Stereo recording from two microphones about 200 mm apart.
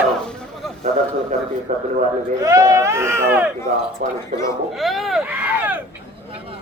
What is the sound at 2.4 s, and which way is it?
Speech, 15° right (ahead or behind).